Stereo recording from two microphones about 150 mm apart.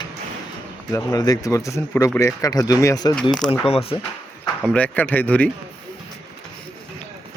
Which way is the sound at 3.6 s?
40° left (ahead or behind).